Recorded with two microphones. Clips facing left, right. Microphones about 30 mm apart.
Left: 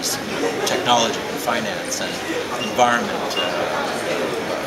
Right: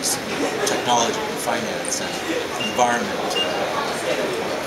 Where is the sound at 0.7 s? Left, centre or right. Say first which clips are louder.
Left 2 dB; left.